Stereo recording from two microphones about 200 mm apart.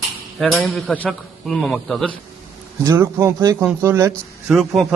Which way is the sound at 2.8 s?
15° right (ahead or behind).